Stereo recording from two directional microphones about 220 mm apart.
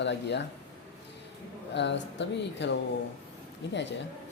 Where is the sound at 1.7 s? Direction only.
55° left (ahead or behind).